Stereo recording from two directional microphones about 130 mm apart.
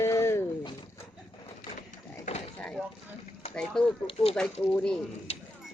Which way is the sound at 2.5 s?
5° left (ahead or behind).